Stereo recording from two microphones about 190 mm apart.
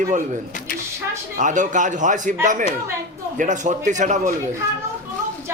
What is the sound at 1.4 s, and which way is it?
A man's voice, 40° right (ahead or behind).